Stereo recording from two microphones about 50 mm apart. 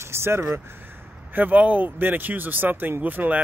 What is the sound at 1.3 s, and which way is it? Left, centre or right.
Speech, right.